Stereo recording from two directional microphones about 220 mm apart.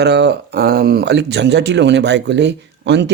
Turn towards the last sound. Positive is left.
turn(degrees=-50)  # may be behind; listen again after turning